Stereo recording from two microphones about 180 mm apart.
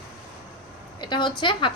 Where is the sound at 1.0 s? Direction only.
25° left (ahead or behind).